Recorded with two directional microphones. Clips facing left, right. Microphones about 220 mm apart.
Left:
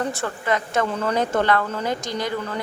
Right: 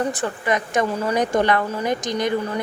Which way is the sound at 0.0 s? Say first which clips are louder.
Right 2 dB; 15° right (ahead or behind).